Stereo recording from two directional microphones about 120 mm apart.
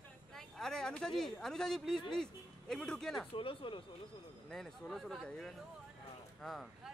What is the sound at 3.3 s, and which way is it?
Speech, 50° left (ahead or behind).